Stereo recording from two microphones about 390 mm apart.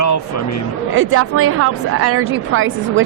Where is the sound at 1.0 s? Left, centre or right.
Right.